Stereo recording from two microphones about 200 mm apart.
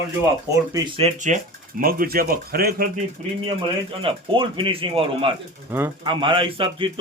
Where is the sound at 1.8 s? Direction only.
45° right (ahead or behind).